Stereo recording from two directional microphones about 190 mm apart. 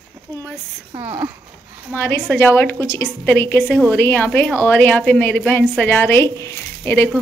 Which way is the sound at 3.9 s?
10° left (ahead or behind).